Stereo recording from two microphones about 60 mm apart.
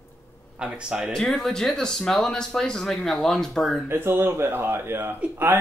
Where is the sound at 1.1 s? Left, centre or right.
Centre.